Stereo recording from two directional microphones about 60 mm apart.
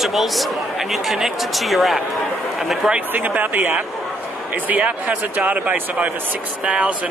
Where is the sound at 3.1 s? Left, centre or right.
Right.